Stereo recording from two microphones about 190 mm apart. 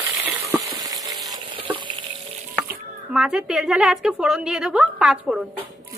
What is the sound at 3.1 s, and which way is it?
A woman's voice, 5° right (ahead or behind).